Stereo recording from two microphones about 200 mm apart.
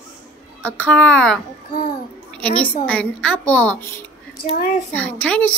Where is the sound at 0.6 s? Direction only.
5° left (ahead or behind).